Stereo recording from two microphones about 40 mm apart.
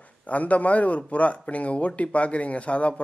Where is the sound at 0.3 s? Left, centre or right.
Left.